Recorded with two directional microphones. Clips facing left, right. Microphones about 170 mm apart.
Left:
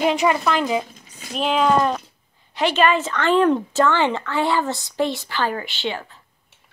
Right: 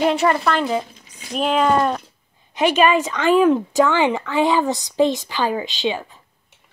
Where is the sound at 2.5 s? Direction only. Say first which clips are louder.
Right 2 dB; 15° right (ahead or behind).